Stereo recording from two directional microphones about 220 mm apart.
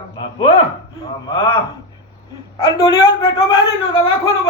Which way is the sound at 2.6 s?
15° left (ahead or behind).